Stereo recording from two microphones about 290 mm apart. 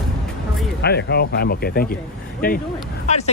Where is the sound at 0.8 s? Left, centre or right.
Left.